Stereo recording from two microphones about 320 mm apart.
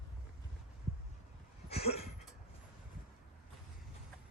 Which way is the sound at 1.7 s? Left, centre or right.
Centre.